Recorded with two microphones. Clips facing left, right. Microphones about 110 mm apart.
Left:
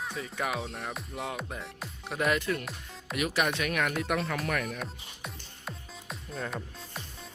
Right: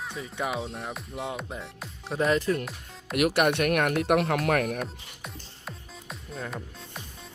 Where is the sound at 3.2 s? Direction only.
60° right (ahead or behind).